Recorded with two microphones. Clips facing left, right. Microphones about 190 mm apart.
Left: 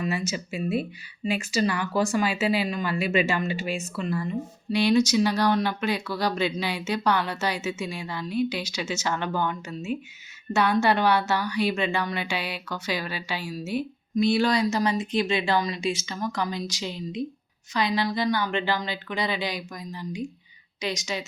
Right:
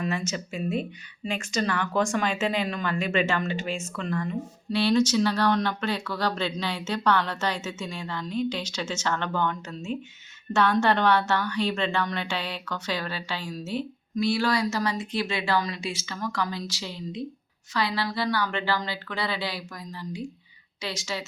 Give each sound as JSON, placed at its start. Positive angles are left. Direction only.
{"t": 0.0, "sound": "a woman's voice", "side_deg": 5}